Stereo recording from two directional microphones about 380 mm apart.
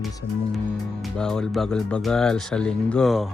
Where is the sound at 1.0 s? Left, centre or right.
Centre.